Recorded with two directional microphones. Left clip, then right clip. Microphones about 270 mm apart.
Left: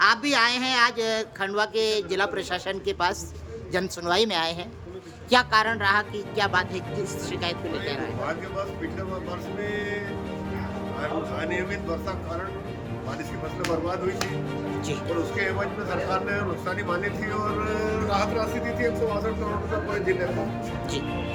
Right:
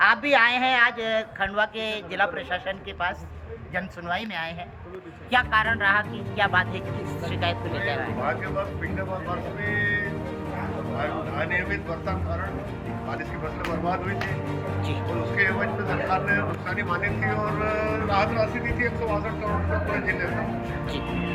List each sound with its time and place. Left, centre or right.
0.0 s speech: centre
9.7 s speech: centre
11.3 s speech: centre
15.4 s speech: centre